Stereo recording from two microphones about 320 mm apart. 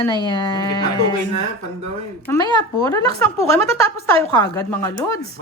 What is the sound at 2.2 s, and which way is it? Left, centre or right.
Speech, centre.